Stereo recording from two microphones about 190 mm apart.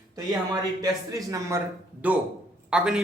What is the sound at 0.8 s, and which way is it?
A man's voice, 20° right (ahead or behind).